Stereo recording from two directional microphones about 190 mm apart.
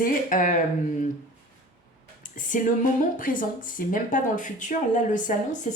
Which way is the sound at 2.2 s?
45° left (ahead or behind).